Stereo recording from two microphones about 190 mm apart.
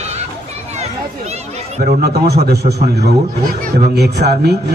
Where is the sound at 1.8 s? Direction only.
55° right (ahead or behind).